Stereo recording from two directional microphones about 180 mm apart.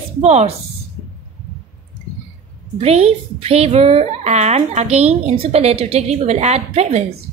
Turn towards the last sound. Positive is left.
turn(degrees=-35)  # may be behind; listen again after turning